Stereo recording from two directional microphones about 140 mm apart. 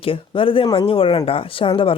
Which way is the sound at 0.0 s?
40° left (ahead or behind).